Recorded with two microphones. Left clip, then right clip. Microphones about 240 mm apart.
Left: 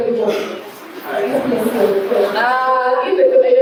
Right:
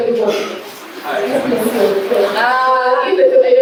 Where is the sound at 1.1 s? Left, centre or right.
Centre.